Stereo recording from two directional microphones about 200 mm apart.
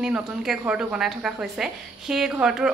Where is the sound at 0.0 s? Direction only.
5° right (ahead or behind).